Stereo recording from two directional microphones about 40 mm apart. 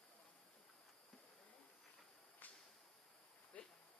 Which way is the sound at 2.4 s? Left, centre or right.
Left.